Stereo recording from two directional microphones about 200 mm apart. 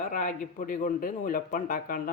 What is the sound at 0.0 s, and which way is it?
A man's voice, 40° left (ahead or behind).